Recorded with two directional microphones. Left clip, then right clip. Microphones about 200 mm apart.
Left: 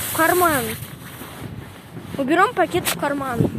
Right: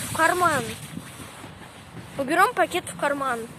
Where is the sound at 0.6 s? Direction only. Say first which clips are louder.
Left 5 dB; 50° left (ahead or behind).